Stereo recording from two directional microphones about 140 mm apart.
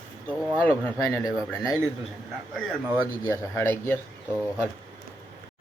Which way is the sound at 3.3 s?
15° left (ahead or behind).